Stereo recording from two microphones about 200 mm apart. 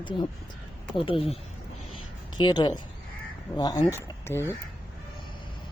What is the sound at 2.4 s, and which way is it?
Speech, 20° left (ahead or behind).